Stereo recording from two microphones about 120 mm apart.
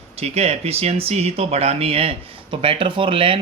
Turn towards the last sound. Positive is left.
turn(degrees=-50)  # may be behind; listen again after turning